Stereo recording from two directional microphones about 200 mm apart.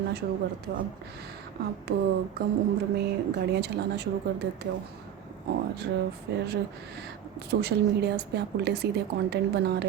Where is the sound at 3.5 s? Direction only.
55° right (ahead or behind).